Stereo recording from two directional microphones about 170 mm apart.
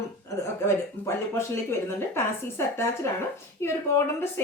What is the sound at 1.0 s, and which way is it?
Speech, 10° left (ahead or behind).